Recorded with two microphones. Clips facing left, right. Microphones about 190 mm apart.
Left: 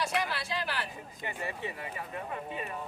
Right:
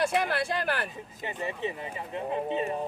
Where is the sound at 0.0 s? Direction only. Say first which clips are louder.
Right 6 dB; 55° right (ahead or behind).